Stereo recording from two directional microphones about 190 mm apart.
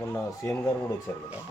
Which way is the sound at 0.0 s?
15° left (ahead or behind).